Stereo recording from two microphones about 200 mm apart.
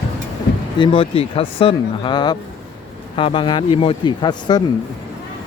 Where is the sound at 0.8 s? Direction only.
25° left (ahead or behind).